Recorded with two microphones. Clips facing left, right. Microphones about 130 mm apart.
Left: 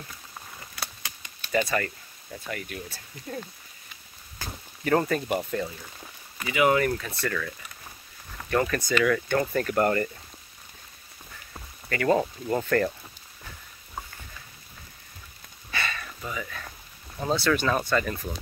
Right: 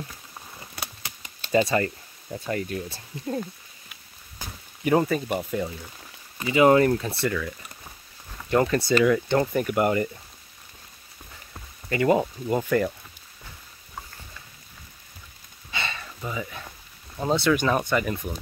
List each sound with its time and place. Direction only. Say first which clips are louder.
0.6 s typewriter: right 2 dB; 25° right (ahead or behind)
2.3 s speech: right 7 dB; 30° right (ahead or behind)
4.4 s speech: even; 10° right (ahead or behind)
6.4 s speech: right 5 dB; 30° right (ahead or behind)
8.5 s speech: right 4 dB; 20° right (ahead or behind)
11.9 s speech: right 2 dB; 20° right (ahead or behind)
15.7 s sniff: even; 25° right (ahead or behind)
16.2 s speech: right 5 dB; 20° right (ahead or behind)